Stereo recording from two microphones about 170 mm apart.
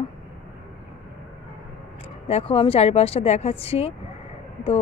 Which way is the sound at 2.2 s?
35° left (ahead or behind).